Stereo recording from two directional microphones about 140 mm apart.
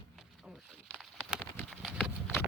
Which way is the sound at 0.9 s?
Centre (ahead or behind).